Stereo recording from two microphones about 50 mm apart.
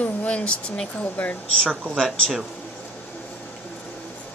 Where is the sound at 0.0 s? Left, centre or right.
Left.